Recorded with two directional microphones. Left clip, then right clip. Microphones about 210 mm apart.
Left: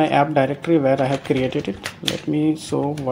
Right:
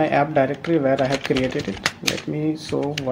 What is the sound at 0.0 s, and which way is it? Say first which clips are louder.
Speech: left 1 dB; 30° left (ahead or behind).